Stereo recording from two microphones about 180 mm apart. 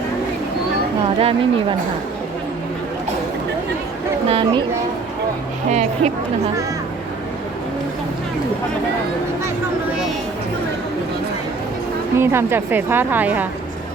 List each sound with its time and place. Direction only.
1.2 s speech: 30° right (ahead or behind)
4.3 s speech: 30° right (ahead or behind)
5.7 s speech: 40° right (ahead or behind)
12.1 s a woman's voice: 15° right (ahead or behind)